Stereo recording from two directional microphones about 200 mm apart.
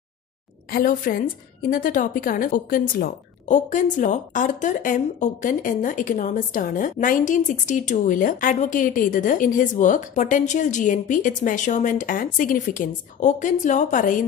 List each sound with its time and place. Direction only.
0.7 s a woman's voice: 45° left (ahead or behind)